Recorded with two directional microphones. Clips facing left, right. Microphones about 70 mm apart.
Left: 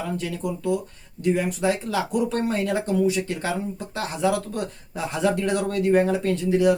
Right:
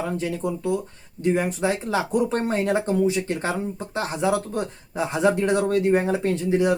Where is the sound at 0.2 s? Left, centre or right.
Right.